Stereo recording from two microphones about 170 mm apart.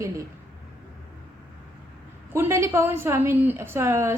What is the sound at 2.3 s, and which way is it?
A woman's voice, 15° right (ahead or behind).